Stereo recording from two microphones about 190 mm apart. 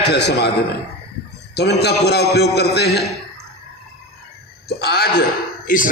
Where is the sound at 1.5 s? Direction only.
60° left (ahead or behind).